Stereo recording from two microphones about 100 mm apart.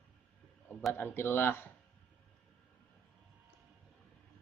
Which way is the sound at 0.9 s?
20° left (ahead or behind).